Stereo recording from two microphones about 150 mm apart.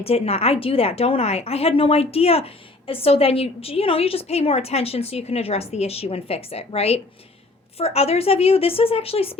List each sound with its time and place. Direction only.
0.0 s a woman's voice: 40° left (ahead or behind)